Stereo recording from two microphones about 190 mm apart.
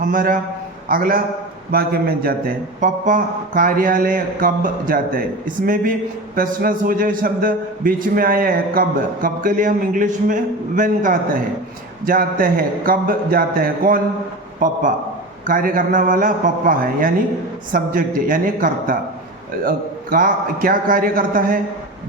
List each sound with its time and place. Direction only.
0.0 s a man's voice: 45° right (ahead or behind)